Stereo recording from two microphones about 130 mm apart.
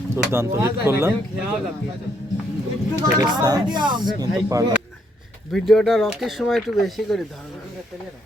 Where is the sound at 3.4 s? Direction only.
30° right (ahead or behind).